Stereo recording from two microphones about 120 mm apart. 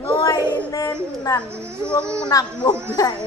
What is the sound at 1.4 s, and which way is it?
Speech, 20° right (ahead or behind).